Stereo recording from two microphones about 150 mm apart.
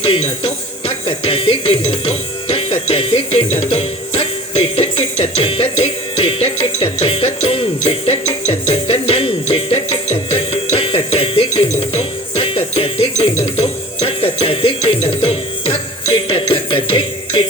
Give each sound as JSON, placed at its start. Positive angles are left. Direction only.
{"t": 0.0, "sound": "speech", "side_deg": 40}